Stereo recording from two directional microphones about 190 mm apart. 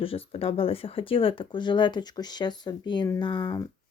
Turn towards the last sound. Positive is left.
turn(degrees=25)  # may be behind; listen again after turning